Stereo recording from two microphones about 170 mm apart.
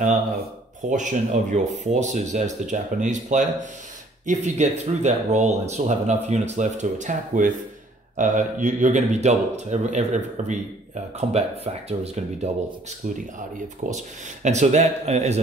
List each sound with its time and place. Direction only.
0.8 s speech: 45° right (ahead or behind)
14.4 s speech: 40° right (ahead or behind)